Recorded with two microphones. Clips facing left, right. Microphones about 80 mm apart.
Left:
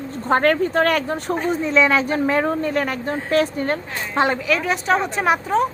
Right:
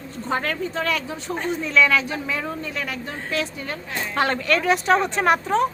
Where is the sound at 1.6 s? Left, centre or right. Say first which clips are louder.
Left 1 dB; left.